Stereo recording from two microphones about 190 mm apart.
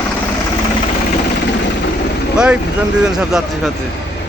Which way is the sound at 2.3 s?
5° right (ahead or behind).